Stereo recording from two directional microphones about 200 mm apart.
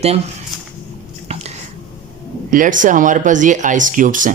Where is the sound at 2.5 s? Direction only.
40° right (ahead or behind).